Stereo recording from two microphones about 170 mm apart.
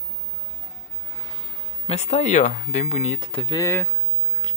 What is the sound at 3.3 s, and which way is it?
Speech, 30° left (ahead or behind).